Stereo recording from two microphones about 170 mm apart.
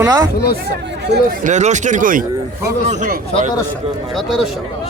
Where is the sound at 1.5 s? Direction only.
45° right (ahead or behind).